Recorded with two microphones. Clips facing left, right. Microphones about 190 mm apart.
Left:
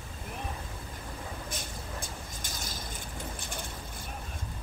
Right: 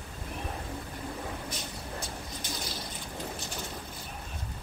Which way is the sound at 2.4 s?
45° left (ahead or behind).